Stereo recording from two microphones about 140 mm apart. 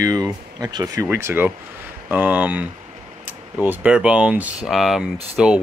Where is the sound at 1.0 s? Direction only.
15° right (ahead or behind).